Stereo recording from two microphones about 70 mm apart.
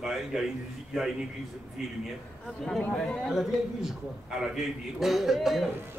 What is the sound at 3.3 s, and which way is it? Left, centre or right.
A man's voice, centre.